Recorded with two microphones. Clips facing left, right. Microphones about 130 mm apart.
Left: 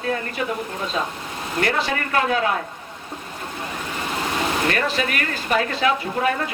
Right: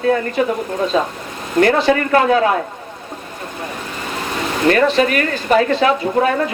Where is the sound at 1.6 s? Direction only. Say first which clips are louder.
Right 10 dB; 40° right (ahead or behind).